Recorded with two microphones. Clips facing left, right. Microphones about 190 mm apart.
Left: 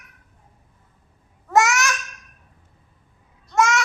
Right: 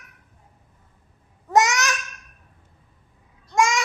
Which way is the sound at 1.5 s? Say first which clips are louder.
Left 1 dB; 20° right (ahead or behind).